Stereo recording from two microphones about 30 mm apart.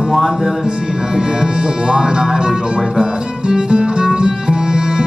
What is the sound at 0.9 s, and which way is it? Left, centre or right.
Speech, right.